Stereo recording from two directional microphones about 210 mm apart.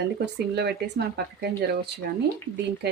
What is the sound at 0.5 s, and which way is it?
Speech, 50° right (ahead or behind).